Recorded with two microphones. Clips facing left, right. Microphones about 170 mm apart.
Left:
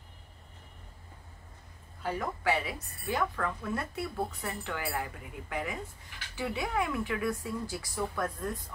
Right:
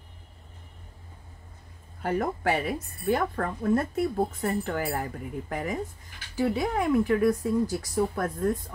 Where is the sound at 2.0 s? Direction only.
50° right (ahead or behind).